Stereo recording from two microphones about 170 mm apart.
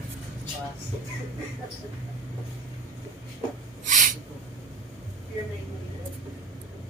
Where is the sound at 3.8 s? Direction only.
50° right (ahead or behind).